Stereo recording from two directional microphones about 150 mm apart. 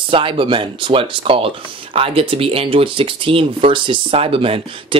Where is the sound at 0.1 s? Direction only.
35° right (ahead or behind).